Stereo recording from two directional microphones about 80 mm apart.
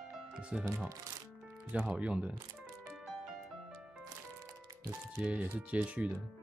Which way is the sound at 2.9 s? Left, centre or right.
Centre.